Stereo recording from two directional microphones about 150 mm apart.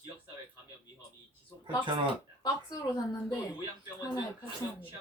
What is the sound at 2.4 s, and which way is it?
Speech, 25° left (ahead or behind).